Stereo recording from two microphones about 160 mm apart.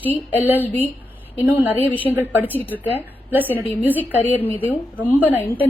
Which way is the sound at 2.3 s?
10° right (ahead or behind).